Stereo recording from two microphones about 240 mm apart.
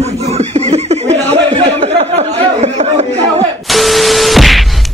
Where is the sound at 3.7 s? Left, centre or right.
Centre.